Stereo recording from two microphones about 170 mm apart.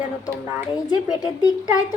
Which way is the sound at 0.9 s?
20° left (ahead or behind).